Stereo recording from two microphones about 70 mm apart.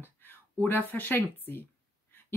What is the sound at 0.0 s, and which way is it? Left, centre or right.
Speech, left.